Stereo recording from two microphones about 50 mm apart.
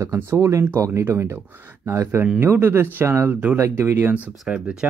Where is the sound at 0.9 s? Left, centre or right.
Right.